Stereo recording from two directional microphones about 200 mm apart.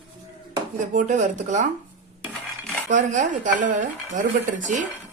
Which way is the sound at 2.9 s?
40° right (ahead or behind).